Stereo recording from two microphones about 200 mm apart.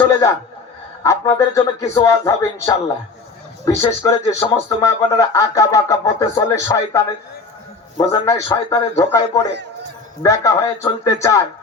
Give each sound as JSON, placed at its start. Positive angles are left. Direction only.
{"t": 0.0, "sound": "a sound", "side_deg": 15}
{"t": 1.0, "sound": "speech", "side_deg": 15}
{"t": 3.7, "sound": "speech", "side_deg": 15}